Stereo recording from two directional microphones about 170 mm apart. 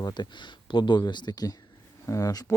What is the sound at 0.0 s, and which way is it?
Speech, 25° left (ahead or behind).